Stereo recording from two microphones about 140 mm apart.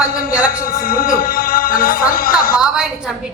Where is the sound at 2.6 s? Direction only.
5° right (ahead or behind).